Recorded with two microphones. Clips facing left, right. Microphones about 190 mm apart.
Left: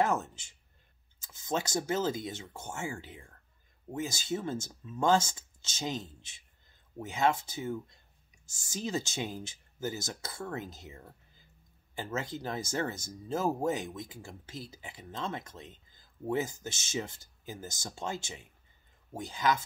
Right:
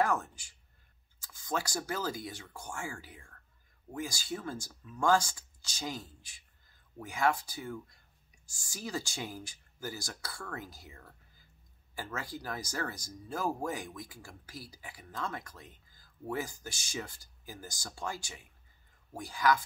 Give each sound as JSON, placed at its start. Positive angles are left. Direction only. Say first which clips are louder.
{"t": 0.0, "sound": "speech", "louder": "left 1 dB", "side_deg": 25}